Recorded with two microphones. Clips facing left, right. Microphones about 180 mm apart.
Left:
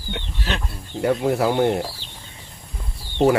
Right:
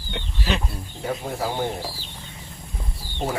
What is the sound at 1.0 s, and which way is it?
Speech, 75° left (ahead or behind).